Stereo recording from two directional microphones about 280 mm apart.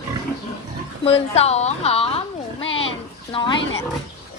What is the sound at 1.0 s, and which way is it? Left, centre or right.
A woman's voice, left.